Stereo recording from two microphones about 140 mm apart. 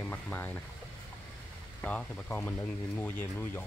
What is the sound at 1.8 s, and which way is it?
Speech, 10° left (ahead or behind).